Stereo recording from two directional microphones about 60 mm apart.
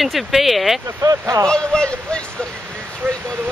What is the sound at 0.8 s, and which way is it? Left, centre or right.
Speech, right.